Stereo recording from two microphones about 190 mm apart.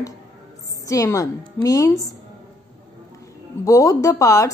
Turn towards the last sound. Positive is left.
turn(degrees=15)  # may be behind; listen again after turning